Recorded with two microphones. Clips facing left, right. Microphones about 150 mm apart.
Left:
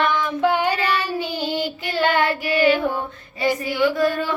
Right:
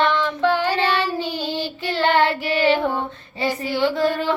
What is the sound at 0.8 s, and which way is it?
Child singing, 25° right (ahead or behind).